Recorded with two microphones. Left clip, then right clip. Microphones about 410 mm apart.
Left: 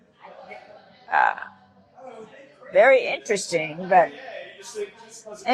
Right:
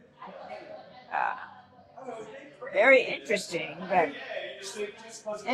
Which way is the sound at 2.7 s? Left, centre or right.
Left.